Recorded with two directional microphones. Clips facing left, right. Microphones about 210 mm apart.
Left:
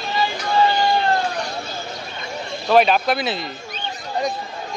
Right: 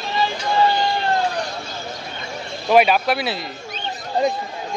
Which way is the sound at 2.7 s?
5° right (ahead or behind).